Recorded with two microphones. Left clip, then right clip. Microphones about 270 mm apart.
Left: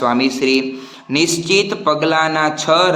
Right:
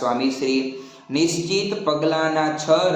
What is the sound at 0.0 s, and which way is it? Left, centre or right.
Speech, left.